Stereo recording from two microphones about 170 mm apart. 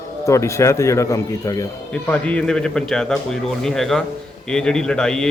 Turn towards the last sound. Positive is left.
turn(degrees=5)  # may be behind; listen again after turning